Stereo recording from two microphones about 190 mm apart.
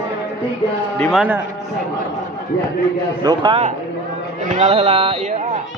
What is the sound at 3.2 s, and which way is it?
A man's voice, 25° right (ahead or behind).